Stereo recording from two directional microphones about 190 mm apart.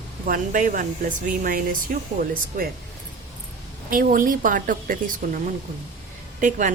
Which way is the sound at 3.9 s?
45° right (ahead or behind).